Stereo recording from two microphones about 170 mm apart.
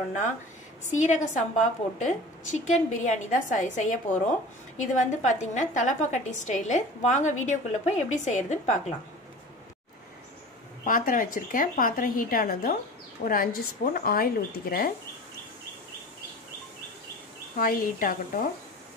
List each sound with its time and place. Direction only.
0.8 s a woman's voice: 45° left (ahead or behind)
10.8 s a woman's voice: 55° left (ahead or behind)
17.6 s a woman's voice: 60° left (ahead or behind)